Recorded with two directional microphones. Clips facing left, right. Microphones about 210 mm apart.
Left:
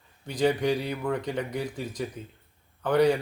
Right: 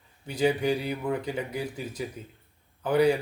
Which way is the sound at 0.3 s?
10° right (ahead or behind).